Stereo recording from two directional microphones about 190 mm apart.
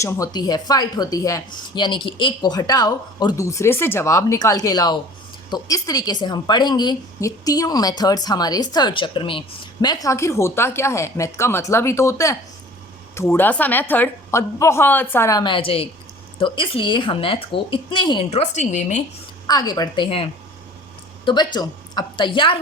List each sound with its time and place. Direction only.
0.0 s a woman's voice: 15° left (ahead or behind); by 19.0 s 40° left (ahead or behind)
19.5 s speech: 20° left (ahead or behind)
21.2 s a woman's voice: 20° left (ahead or behind)